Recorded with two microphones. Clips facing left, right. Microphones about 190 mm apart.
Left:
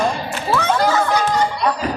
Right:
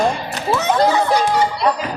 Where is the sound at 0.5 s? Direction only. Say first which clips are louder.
Even; 20° right (ahead or behind).